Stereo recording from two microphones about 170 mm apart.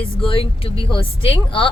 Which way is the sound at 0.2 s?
30° left (ahead or behind).